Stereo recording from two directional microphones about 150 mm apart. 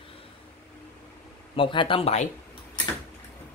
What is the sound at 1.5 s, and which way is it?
Speech, 35° left (ahead or behind).